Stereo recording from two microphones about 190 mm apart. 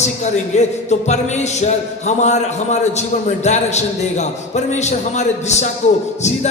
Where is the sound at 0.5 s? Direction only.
35° left (ahead or behind).